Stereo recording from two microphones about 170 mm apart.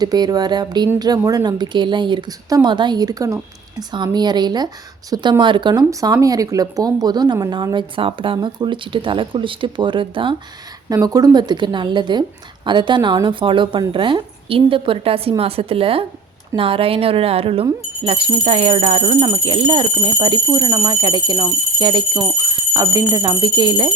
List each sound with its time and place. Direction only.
0.0 s speech: 20° right (ahead or behind)